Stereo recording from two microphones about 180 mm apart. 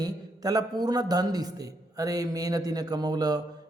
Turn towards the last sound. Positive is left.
turn(degrees=-20)  # may be behind; listen again after turning